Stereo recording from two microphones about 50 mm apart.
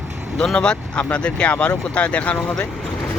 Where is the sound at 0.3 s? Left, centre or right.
Centre.